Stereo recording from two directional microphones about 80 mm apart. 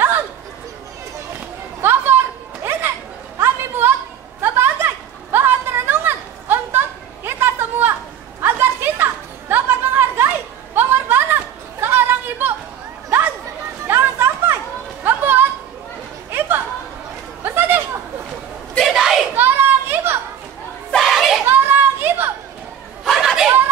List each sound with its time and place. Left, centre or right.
1.8 s chatter: right
3.3 s a sound: right
13.8 s music: right
16.3 s chatter: right
18.9 s a sound: centre
19.3 s children playing: right
20.9 s children playing: centre
21.5 s children playing: right
23.0 s a sound: centre